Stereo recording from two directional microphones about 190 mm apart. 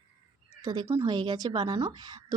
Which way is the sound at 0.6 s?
20° right (ahead or behind).